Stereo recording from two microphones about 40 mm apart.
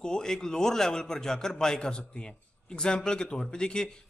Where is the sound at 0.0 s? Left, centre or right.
Centre.